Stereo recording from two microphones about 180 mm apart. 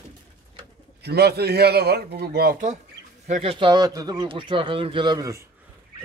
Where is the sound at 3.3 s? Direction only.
30° right (ahead or behind).